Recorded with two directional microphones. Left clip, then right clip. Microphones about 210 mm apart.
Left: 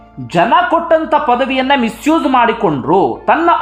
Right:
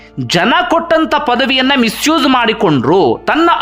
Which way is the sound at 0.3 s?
25° right (ahead or behind).